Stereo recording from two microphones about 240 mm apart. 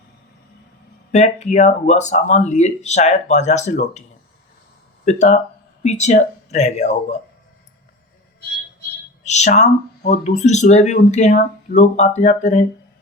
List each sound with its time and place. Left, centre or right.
1.1 s speech: left
5.0 s speech: left
9.2 s speech: left